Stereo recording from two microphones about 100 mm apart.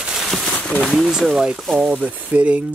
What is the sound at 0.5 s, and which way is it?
Speech, 10° left (ahead or behind).